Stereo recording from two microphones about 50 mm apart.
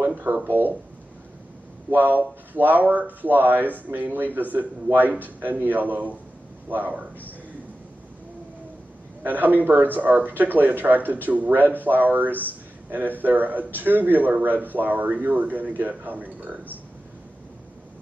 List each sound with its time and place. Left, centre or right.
0.0 s speech: right
1.9 s speech: right
9.2 s speech: right